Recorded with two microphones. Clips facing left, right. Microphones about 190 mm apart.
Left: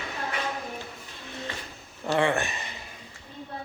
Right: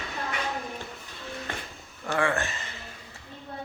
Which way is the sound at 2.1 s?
20° left (ahead or behind).